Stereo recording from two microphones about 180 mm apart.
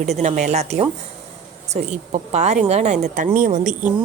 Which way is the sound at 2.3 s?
40° right (ahead or behind).